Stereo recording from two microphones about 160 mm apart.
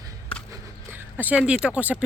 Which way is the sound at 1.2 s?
10° right (ahead or behind).